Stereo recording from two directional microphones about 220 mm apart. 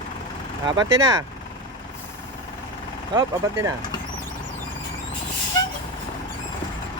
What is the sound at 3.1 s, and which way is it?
Speech, 20° right (ahead or behind).